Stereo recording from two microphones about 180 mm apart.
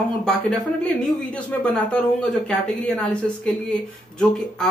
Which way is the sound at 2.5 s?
5° left (ahead or behind).